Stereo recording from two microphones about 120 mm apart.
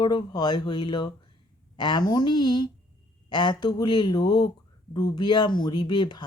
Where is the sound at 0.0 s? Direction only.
40° left (ahead or behind).